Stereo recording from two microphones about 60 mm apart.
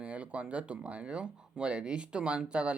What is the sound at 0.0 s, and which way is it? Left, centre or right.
Speech, right.